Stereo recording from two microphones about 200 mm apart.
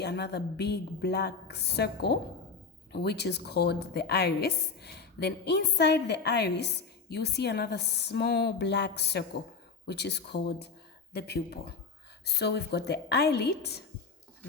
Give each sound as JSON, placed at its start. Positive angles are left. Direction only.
{"t": 0.0, "sound": "a woman's voice", "side_deg": 55}